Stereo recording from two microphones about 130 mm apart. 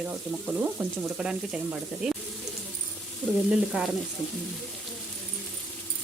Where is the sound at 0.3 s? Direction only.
10° right (ahead or behind).